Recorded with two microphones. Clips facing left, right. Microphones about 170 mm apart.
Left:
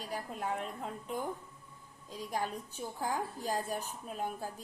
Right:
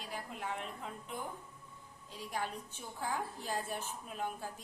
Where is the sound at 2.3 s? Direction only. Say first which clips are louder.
Left 3 dB; 40° left (ahead or behind).